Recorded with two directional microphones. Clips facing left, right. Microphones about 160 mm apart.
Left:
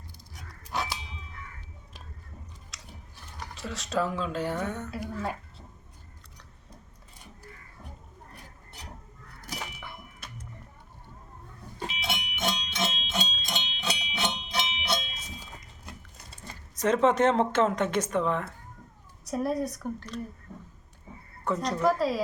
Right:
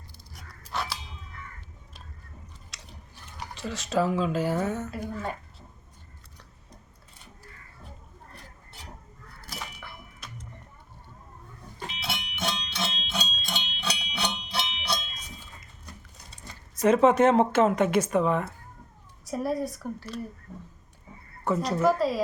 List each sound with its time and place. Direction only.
0.7 s a sound: 15° left (ahead or behind)
2.7 s biting: centre (ahead or behind)
3.5 s speech: centre (ahead or behind)
12.0 s music: 15° left (ahead or behind)
16.8 s speech: 10° right (ahead or behind)
21.4 s speech: 5° right (ahead or behind)